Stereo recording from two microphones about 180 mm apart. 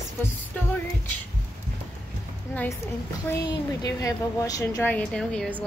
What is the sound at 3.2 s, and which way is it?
A woman's voice, 20° left (ahead or behind).